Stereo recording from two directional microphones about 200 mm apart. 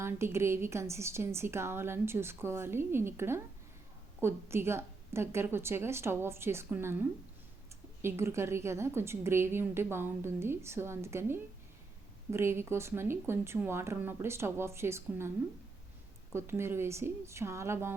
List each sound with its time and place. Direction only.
0.0 s a woman's voice: 15° right (ahead or behind)
16.3 s a woman's voice: 10° right (ahead or behind)